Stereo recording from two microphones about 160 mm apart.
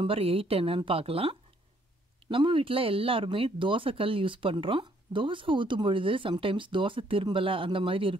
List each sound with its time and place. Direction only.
0.0 s speech: 35° right (ahead or behind)